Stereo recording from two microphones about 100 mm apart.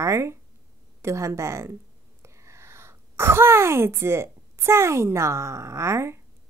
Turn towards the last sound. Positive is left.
turn(degrees=-25)  # may be behind; listen again after turning